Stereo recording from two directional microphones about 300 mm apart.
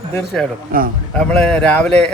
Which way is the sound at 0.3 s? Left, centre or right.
Centre.